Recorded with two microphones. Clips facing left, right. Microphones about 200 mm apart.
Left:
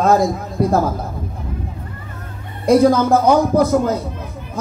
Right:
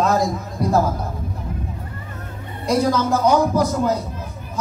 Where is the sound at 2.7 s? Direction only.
55° left (ahead or behind).